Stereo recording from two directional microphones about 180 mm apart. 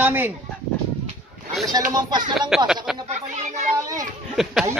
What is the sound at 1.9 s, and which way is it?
Speech, 25° right (ahead or behind).